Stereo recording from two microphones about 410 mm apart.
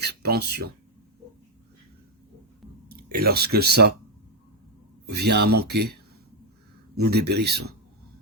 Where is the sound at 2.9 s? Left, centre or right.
Right.